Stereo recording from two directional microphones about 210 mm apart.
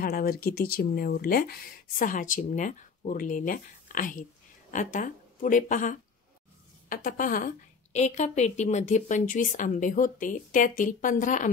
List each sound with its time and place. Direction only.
0.0 s a woman's voice: 45° left (ahead or behind)